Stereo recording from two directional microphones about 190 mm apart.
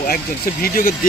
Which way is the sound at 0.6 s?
50° left (ahead or behind).